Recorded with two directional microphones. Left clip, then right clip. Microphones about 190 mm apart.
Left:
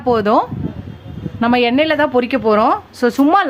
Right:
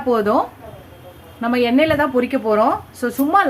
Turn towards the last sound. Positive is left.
turn(degrees=45)  # may be behind; listen again after turning